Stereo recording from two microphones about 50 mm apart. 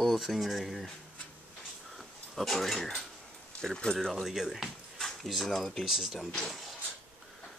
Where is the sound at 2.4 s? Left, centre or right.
Centre.